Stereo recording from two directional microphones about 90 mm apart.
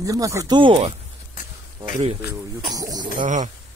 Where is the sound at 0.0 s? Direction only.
40° right (ahead or behind).